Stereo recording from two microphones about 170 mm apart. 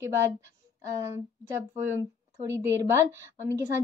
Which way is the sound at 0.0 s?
15° right (ahead or behind).